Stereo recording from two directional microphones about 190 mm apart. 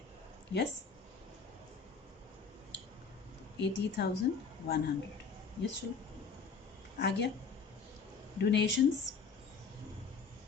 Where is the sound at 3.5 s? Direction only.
65° left (ahead or behind).